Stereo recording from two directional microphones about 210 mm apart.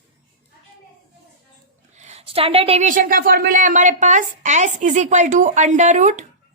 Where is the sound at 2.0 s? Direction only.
30° right (ahead or behind).